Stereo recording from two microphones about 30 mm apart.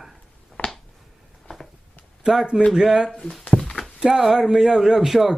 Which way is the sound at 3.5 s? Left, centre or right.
Centre.